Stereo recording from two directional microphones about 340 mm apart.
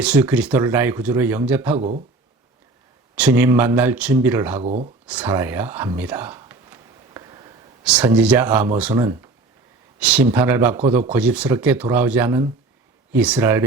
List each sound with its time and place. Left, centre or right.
0.0 s speech: centre
3.2 s speech: centre
4.6 s speech: centre
5.0 s a sound: centre
8.8 s speech: centre